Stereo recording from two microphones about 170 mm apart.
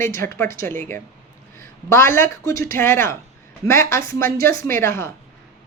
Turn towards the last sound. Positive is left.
turn(degrees=15)  # may be behind; listen again after turning